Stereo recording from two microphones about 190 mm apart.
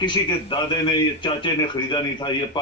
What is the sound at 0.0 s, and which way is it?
Speech, 25° left (ahead or behind).